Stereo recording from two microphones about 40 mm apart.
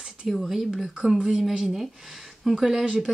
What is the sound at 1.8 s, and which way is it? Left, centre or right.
Speech, centre.